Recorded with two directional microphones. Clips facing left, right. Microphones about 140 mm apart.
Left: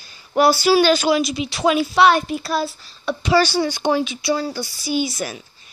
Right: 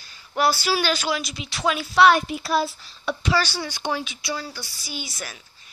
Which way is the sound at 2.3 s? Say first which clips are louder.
Left 1 dB; 15° right (ahead or behind).